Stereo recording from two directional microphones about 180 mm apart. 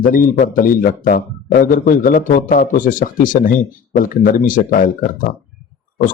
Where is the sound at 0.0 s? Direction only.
50° left (ahead or behind).